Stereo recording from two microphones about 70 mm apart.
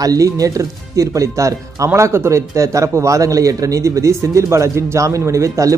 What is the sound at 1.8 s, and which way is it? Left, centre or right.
A man's voice, right.